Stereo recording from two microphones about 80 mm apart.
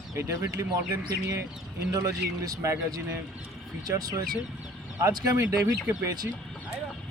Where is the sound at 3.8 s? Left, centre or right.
Right.